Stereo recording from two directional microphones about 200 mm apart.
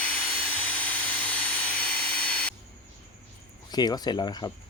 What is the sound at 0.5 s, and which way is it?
Tools, 5° left (ahead or behind).